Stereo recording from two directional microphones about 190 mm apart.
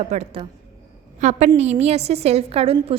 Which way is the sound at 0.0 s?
35° right (ahead or behind).